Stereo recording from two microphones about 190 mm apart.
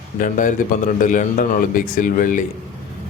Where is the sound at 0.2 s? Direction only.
45° left (ahead or behind).